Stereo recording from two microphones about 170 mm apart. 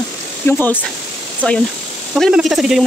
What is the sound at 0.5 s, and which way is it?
Speech, 15° left (ahead or behind).